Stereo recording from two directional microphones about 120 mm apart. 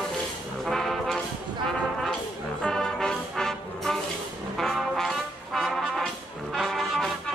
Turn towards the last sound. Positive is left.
turn(degrees=5)  # may be behind; listen again after turning